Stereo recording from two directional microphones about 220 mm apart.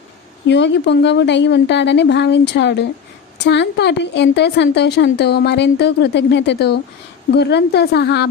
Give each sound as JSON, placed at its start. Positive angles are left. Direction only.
{"t": 0.4, "sound": "a woman's voice", "side_deg": 55}